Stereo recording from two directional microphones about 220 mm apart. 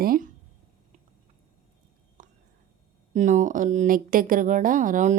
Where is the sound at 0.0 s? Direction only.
40° right (ahead or behind).